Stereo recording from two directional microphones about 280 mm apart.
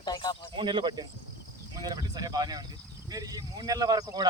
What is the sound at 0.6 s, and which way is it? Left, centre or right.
Speech, centre.